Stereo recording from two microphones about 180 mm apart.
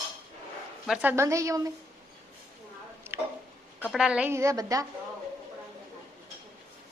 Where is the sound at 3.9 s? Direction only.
5° right (ahead or behind).